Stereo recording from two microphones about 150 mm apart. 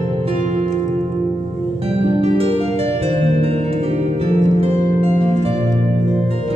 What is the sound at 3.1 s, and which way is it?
Harp, 45° right (ahead or behind).